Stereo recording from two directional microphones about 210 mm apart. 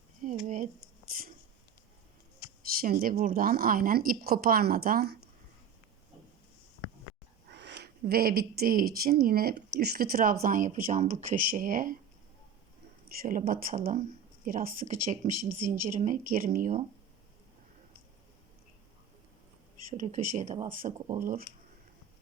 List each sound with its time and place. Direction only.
0.4 s speech: 40° right (ahead or behind)
2.8 s a woman's voice: 40° right (ahead or behind)
7.6 s a woman's voice: 50° right (ahead or behind)
13.1 s speech: 40° right (ahead or behind)
19.9 s speech: 35° right (ahead or behind)